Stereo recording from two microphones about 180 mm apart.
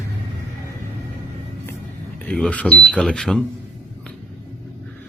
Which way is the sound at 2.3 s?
5° left (ahead or behind).